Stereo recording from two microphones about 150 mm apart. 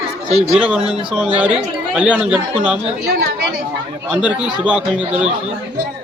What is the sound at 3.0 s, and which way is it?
Chatter, 90° right.